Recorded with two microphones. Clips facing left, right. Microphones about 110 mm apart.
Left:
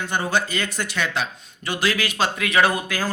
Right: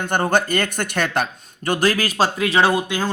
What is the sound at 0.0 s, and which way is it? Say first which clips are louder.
Speech: right 4 dB; 50° right (ahead or behind).